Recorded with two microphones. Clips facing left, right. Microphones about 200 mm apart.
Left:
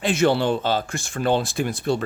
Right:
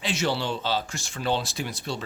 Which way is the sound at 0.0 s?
55° left (ahead or behind).